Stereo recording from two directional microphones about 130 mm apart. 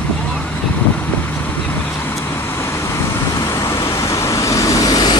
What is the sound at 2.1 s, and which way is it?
Vehicle, 20° left (ahead or behind).